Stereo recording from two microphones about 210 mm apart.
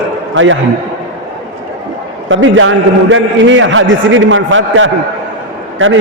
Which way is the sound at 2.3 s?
65° right (ahead or behind).